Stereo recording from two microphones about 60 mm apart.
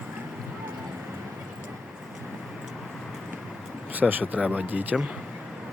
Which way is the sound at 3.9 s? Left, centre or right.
Right.